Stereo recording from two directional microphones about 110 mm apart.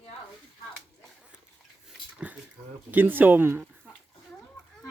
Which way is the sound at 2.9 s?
15° right (ahead or behind).